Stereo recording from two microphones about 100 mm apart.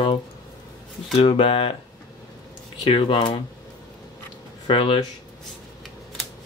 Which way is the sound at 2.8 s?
70° left (ahead or behind).